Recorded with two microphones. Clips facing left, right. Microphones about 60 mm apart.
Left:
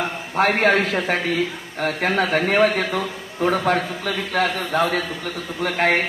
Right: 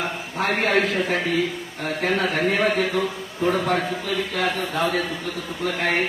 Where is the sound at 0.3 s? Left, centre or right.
Left.